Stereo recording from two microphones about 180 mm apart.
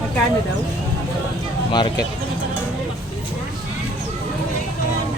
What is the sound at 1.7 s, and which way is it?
Speech, 25° left (ahead or behind).